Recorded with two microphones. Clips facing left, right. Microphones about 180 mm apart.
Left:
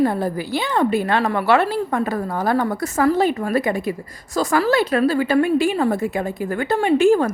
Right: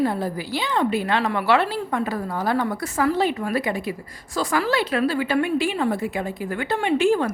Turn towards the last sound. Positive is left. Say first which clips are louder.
# left 4 dB
turn(degrees=45)  # may be behind; listen again after turning